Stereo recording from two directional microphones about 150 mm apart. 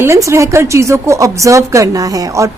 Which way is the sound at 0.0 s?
20° right (ahead or behind).